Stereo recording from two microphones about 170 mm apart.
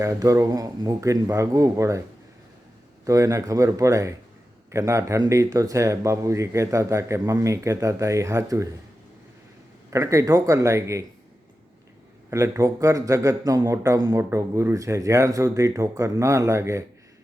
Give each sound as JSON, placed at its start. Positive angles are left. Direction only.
{"t": 0.0, "sound": "speech", "side_deg": -20}
{"t": 3.0, "sound": "speech", "side_deg": -20}
{"t": 9.9, "sound": "speech", "side_deg": -15}
{"t": 12.3, "sound": "speech", "side_deg": -20}